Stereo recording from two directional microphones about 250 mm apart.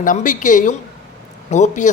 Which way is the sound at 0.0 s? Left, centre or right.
Left.